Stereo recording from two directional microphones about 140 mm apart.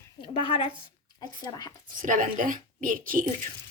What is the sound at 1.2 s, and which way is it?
Speech, 25° left (ahead or behind).